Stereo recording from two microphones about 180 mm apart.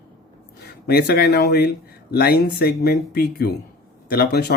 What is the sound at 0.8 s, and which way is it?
Speech, 60° left (ahead or behind).